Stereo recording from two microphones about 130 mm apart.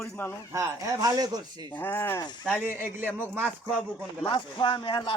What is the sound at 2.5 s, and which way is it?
Speech, 15° right (ahead or behind).